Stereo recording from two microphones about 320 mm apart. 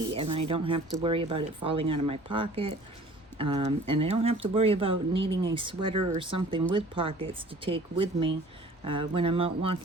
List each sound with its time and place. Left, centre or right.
0.1 s speech: centre